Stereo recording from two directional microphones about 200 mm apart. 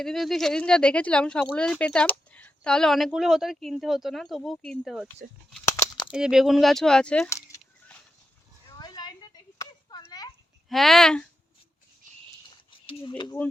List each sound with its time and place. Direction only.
0.0 s speech: centre (ahead or behind)
6.1 s speech: 5° right (ahead or behind)
8.8 s a sound: 20° left (ahead or behind)
10.7 s speech: centre (ahead or behind)
12.8 s speech: 25° left (ahead or behind)